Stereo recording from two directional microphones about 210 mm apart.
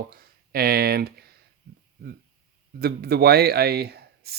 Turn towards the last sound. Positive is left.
turn(degrees=-50)  # may be behind; listen again after turning